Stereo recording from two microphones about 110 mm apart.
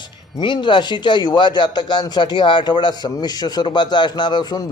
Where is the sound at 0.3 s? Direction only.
45° left (ahead or behind).